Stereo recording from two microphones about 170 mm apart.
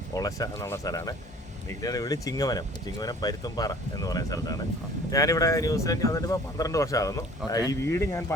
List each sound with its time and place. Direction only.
0.2 s speech: 20° left (ahead or behind)